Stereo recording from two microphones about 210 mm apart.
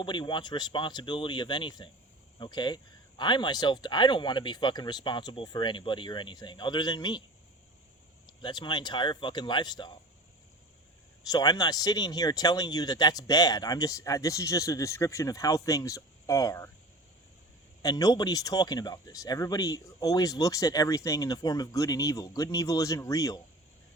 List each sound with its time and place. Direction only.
0.0 s speech: 20° left (ahead or behind)
8.4 s speech: 20° left (ahead or behind)
11.3 s speech: 20° left (ahead or behind)
17.8 s speech: 15° left (ahead or behind)